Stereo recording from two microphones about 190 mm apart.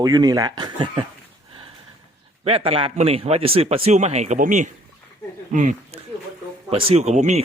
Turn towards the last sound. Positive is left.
turn(degrees=-35)  # may be behind; listen again after turning